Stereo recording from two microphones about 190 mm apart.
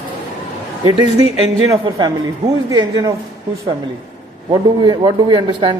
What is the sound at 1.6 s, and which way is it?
A man's voice, 15° right (ahead or behind).